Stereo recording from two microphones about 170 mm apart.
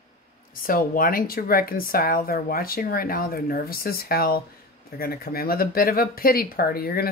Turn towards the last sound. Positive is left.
turn(degrees=60)  # may be behind; listen again after turning